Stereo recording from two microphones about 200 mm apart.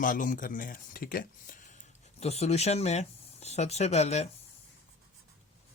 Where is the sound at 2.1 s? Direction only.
30° left (ahead or behind).